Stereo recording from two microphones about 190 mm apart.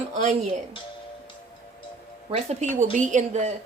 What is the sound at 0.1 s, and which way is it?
Speech, 40° right (ahead or behind).